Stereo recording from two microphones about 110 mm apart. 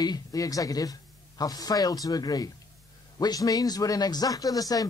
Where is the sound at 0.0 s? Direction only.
35° left (ahead or behind).